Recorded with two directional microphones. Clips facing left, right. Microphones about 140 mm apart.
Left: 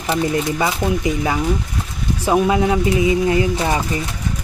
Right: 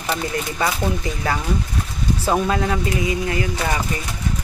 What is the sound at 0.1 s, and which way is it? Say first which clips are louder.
Speech: left 6 dB; 20° left (ahead or behind).